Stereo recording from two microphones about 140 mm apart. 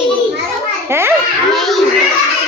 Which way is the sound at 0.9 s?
20° right (ahead or behind).